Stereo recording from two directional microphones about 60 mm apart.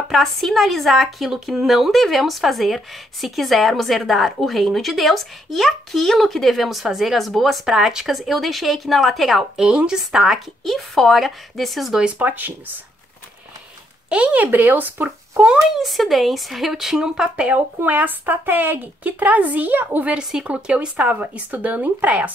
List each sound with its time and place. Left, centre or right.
0.1 s a woman's voice: centre
9.6 s a woman's voice: centre
10.6 s a woman's voice: centre
12.2 s speech: right
14.0 s speech: centre
15.0 s a child's voice: centre
17.8 s speech: right
20.2 s speech: centre